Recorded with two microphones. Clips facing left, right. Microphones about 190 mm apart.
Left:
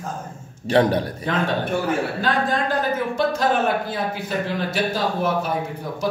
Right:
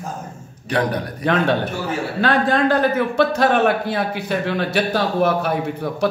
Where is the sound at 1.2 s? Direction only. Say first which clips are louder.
Right 7 dB; 70° right (ahead or behind).